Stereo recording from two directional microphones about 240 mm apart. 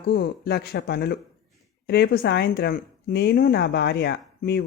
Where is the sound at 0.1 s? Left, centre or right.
Left.